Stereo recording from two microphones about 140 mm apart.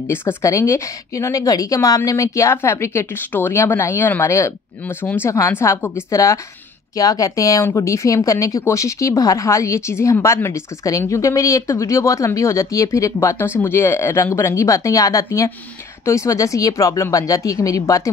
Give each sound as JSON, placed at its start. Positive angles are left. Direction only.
{"t": 0.1, "sound": "speech", "side_deg": 15}